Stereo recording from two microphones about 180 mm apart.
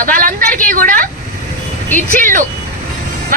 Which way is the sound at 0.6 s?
45° right (ahead or behind).